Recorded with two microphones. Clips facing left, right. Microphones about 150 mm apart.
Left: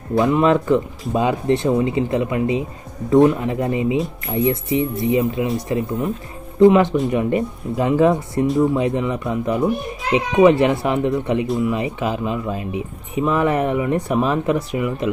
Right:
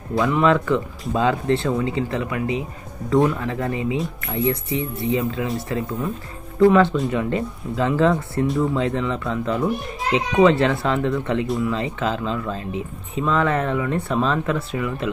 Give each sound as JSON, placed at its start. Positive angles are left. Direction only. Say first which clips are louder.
{"t": 0.2, "sound": "speech", "louder": "left 2 dB", "side_deg": 20}